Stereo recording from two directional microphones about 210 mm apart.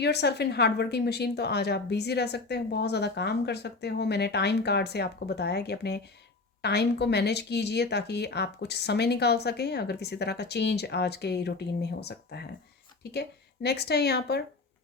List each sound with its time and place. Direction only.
0.0 s a woman's voice: 50° left (ahead or behind)